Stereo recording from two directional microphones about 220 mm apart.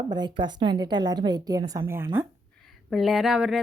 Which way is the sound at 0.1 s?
20° right (ahead or behind).